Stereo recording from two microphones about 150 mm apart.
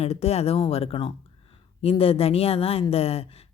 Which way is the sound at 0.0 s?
45° left (ahead or behind).